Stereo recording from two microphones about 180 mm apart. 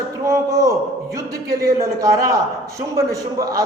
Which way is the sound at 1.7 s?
20° right (ahead or behind).